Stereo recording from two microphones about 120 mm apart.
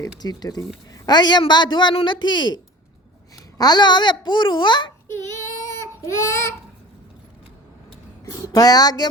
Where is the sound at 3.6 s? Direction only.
35° left (ahead or behind).